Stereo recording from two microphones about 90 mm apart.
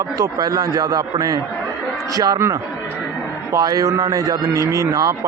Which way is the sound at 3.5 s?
40° right (ahead or behind).